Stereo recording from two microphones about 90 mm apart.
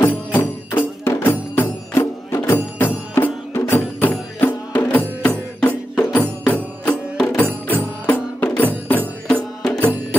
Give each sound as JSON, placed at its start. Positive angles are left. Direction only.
{"t": 0.0, "sound": "music", "side_deg": 20}
{"t": 7.6, "sound": "music", "side_deg": 20}
{"t": 9.3, "sound": "music", "side_deg": 10}